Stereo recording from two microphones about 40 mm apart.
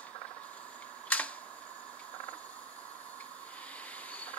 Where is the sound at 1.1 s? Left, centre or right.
Left.